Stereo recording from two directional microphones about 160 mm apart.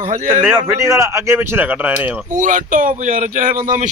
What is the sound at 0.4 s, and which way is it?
Speech, 15° right (ahead or behind).